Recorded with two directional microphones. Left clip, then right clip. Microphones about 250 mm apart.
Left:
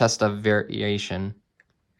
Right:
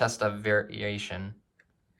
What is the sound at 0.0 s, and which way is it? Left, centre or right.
Speech, left.